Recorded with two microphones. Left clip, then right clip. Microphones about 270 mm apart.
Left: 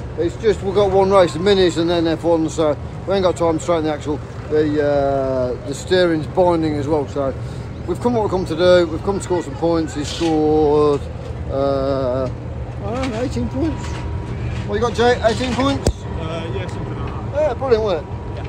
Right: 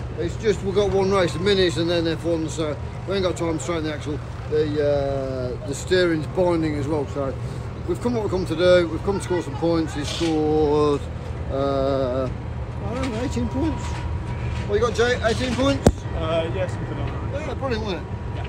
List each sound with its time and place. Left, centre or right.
0.2 s speech: centre
4.6 s speech: left
5.7 s speech: centre
14.7 s speech: centre
17.4 s speech: left